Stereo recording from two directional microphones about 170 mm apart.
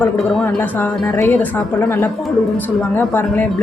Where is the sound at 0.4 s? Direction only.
15° left (ahead or behind).